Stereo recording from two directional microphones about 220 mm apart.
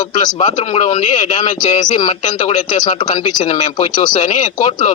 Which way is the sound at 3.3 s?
20° left (ahead or behind).